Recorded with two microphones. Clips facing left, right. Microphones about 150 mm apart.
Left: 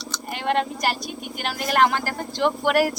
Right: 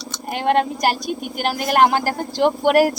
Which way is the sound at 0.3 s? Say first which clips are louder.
Right 5 dB; 50° right (ahead or behind).